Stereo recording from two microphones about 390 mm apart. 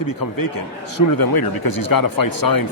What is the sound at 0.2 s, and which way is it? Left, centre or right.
A man's voice, left.